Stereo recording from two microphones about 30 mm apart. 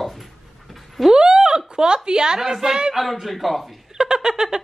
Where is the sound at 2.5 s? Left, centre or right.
Centre.